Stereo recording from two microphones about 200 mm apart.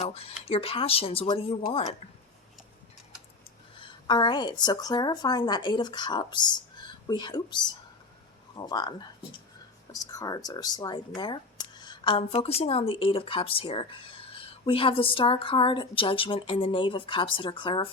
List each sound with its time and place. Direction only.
0.0 s speech: 30° left (ahead or behind)
3.8 s speech: 25° left (ahead or behind)